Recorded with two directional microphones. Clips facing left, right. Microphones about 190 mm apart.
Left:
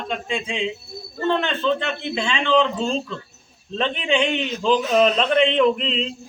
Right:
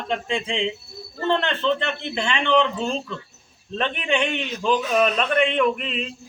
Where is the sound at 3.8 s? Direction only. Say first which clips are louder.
Left 3 dB; 15° left (ahead or behind).